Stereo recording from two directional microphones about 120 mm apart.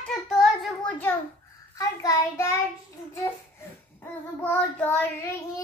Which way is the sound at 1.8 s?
30° left (ahead or behind).